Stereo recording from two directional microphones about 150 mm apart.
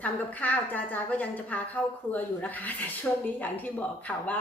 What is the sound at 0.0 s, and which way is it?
A woman's voice, 10° left (ahead or behind).